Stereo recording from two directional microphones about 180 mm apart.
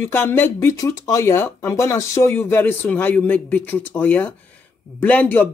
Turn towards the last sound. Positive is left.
turn(degrees=10)  # may be behind; listen again after turning